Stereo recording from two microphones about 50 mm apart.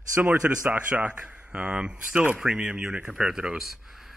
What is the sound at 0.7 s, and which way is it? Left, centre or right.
Speech, right.